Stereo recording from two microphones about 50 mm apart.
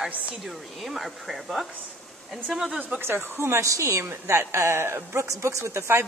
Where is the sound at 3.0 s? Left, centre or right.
Right.